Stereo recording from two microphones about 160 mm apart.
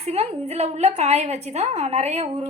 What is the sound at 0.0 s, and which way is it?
A woman's voice, 40° right (ahead or behind).